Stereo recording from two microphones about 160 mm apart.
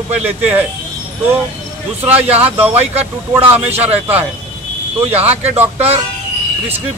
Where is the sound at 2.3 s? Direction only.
40° right (ahead or behind).